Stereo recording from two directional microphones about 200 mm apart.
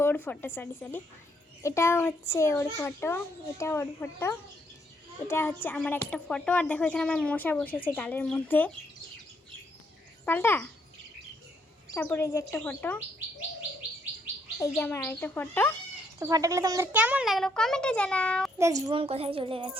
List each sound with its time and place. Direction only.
0.0 s speech: 10° left (ahead or behind)
10.2 s speech: 10° left (ahead or behind)
11.9 s speech: 10° left (ahead or behind)
14.8 s speech: 10° left (ahead or behind)
16.2 s a child's voice: 15° right (ahead or behind); by 18.5 s 5° left (ahead or behind)
18.6 s a child's voice: 15° right (ahead or behind)